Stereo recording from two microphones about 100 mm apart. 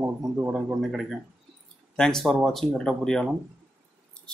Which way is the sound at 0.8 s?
Centre (ahead or behind).